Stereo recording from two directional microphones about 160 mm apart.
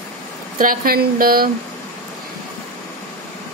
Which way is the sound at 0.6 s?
65° right (ahead or behind).